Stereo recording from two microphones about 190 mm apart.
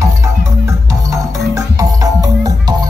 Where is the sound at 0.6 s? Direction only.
15° right (ahead or behind).